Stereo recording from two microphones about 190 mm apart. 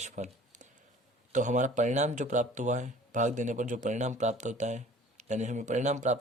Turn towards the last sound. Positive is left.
turn(degrees=-40)  # may be behind; listen again after turning